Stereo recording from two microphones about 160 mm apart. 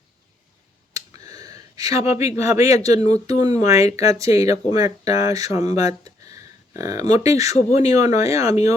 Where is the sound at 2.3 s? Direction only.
15° right (ahead or behind).